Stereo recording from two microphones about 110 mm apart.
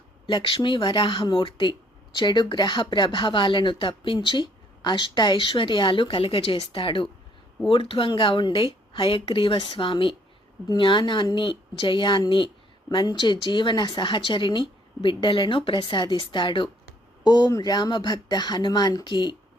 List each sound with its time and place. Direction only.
0.3 s speech: 50° left (ahead or behind)